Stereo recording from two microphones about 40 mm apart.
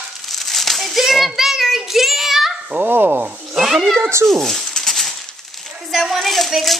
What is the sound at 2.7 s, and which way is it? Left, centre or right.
Speech, right.